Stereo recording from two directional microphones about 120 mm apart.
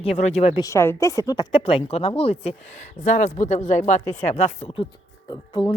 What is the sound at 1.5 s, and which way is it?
Speech, 50° left (ahead or behind).